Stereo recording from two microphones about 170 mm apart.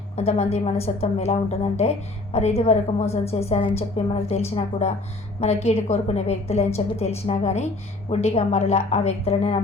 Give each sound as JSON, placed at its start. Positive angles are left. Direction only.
{"t": 0.2, "sound": "a woman's voice", "side_deg": 35}